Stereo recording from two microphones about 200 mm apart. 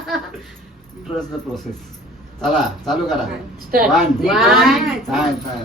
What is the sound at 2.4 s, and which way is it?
Speech, centre (ahead or behind).